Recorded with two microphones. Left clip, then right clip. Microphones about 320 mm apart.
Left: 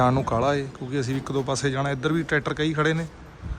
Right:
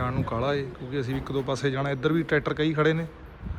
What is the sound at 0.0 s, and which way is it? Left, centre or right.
Speech, centre.